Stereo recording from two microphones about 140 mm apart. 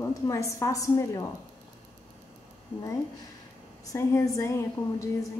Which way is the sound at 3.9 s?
25° left (ahead or behind).